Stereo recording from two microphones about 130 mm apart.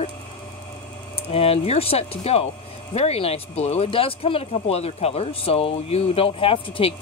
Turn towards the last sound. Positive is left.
turn(degrees=45)  # may be behind; listen again after turning